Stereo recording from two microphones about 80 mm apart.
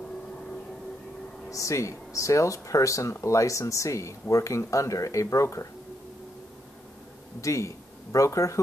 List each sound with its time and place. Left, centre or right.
1.5 s speech: left
7.4 s speech: left